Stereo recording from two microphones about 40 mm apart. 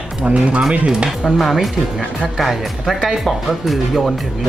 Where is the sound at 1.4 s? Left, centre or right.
Centre.